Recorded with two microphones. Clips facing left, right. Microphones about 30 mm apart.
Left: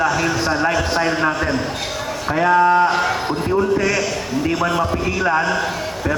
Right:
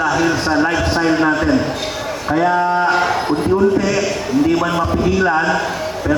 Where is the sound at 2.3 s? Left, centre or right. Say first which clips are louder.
Left 1 dB; centre.